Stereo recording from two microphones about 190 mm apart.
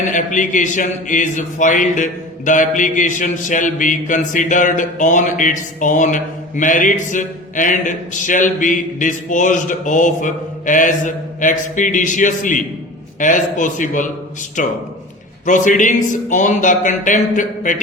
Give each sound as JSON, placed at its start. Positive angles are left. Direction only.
{"t": 0.1, "sound": "a man's voice", "side_deg": 40}
{"t": 15.4, "sound": "speech", "side_deg": 40}